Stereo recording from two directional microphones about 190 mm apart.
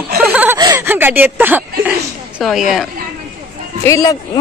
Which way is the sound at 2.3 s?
Centre (ahead or behind).